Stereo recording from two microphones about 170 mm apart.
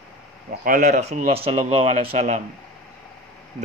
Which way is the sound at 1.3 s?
35° right (ahead or behind).